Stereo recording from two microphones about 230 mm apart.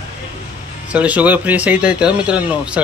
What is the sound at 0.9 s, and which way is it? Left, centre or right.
Speech, centre.